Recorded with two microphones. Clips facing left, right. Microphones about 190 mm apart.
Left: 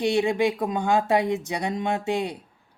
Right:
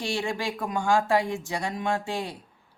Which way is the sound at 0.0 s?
20° left (ahead or behind).